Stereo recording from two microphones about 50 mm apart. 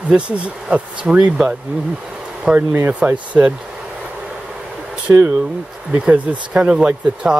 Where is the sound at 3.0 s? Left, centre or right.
Right.